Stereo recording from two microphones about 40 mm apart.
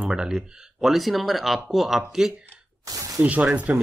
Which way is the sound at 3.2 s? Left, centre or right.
Right.